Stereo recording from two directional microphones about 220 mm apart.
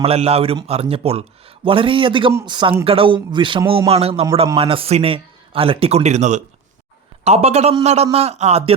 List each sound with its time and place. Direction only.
0.0 s speech: 25° right (ahead or behind)